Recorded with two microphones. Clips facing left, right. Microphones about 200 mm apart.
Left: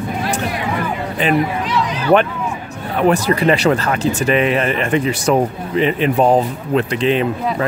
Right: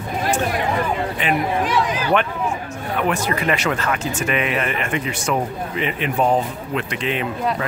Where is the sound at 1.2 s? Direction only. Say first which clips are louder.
Left 7 dB; 35° left (ahead or behind).